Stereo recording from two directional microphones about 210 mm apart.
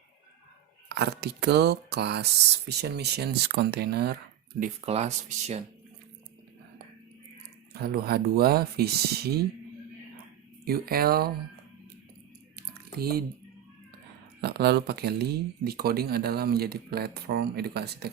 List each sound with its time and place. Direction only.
0.9 s speech: 50° right (ahead or behind)
4.6 s speech: 30° right (ahead or behind)
7.7 s speech: 45° right (ahead or behind)
10.7 s speech: 45° right (ahead or behind)
12.5 s typing: 45° right (ahead or behind)
14.4 s speech: 50° right (ahead or behind)